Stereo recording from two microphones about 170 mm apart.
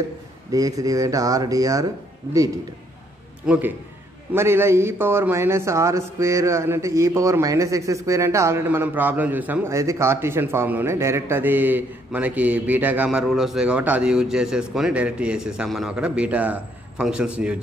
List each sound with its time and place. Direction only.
0.5 s speech: 20° right (ahead or behind)
3.4 s a man's voice: 10° right (ahead or behind)